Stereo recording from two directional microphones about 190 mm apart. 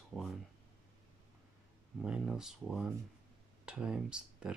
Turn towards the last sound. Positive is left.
turn(degrees=-5)  # may be behind; listen again after turning